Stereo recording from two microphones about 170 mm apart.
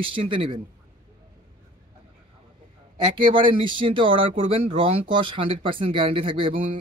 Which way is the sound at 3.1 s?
30° right (ahead or behind).